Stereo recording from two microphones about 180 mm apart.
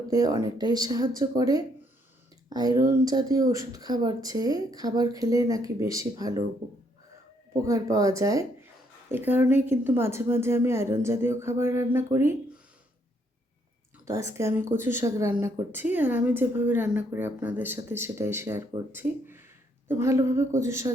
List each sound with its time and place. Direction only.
0.1 s speech: 20° right (ahead or behind)
7.6 s speech: 20° right (ahead or behind)
14.0 s speech: 15° right (ahead or behind)